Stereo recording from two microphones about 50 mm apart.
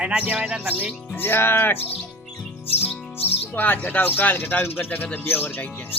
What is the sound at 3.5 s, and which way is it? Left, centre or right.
Speech, left.